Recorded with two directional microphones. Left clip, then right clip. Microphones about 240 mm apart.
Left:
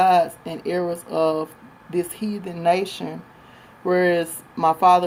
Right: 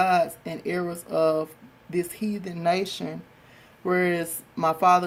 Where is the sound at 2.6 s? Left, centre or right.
Centre.